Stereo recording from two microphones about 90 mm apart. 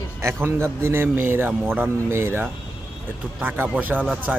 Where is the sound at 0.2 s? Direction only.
25° right (ahead or behind).